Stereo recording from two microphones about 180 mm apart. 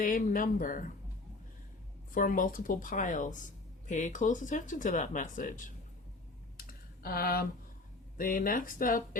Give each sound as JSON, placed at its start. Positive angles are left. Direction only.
{"t": 0.0, "sound": "speech", "side_deg": 50}
{"t": 2.1, "sound": "speech", "side_deg": 50}
{"t": 6.6, "sound": "computer keyboard", "side_deg": 55}
{"t": 8.2, "sound": "speech", "side_deg": 50}